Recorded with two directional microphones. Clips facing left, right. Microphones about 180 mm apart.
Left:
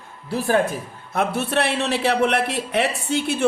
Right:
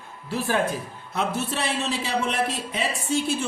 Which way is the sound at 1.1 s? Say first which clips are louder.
Left 5 dB; 60° left (ahead or behind).